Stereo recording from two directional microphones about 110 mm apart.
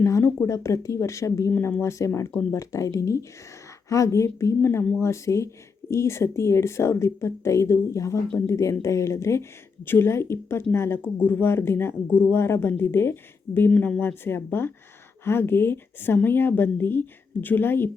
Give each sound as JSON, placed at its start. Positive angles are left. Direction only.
{"t": 0.0, "sound": "a sound", "side_deg": 25}
{"t": 0.4, "sound": "speech", "side_deg": 25}
{"t": 13.7, "sound": "speech", "side_deg": 10}